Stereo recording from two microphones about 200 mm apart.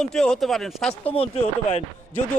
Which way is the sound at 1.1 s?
30° left (ahead or behind).